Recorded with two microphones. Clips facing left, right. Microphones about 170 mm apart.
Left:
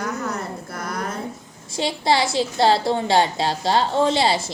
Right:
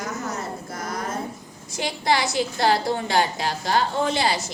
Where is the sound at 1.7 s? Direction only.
25° left (ahead or behind).